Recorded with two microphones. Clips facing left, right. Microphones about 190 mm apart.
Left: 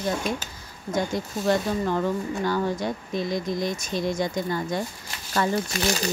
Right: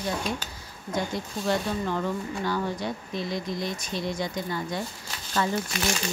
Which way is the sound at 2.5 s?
45° left (ahead or behind).